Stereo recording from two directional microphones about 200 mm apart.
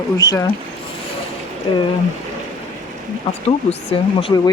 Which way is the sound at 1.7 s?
25° left (ahead or behind).